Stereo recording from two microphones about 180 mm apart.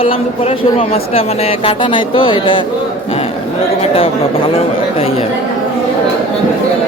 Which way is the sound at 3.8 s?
30° left (ahead or behind).